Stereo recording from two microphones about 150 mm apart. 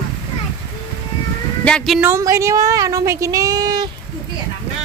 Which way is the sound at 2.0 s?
15° right (ahead or behind).